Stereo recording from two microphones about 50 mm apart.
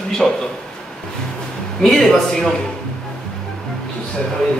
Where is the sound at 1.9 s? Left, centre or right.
Centre.